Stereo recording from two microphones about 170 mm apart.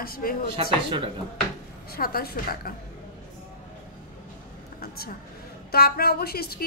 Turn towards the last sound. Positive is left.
turn(degrees=65)  # may be behind; listen again after turning